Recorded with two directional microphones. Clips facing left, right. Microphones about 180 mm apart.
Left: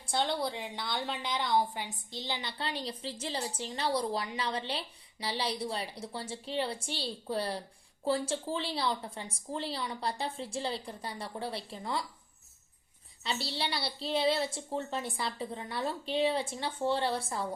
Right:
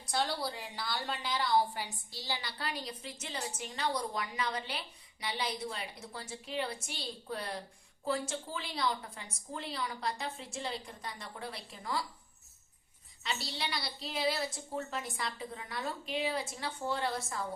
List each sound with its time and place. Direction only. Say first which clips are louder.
0.0 s a woman's voice: left 3 dB; 25° left (ahead or behind)
13.2 s a woman's voice: left 3 dB; 30° left (ahead or behind)